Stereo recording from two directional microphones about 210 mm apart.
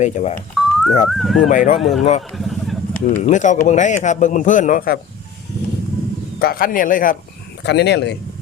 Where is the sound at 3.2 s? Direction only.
35° left (ahead or behind).